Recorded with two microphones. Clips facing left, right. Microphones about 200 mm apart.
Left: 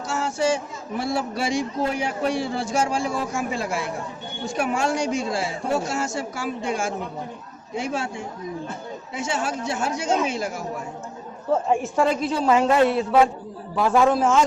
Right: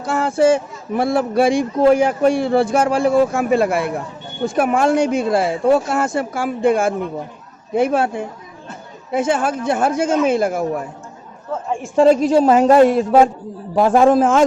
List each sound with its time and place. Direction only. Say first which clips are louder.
0.0 s speech: right 8 dB; 55° right (ahead or behind)
12.0 s a man's voice: right 11 dB; 40° right (ahead or behind)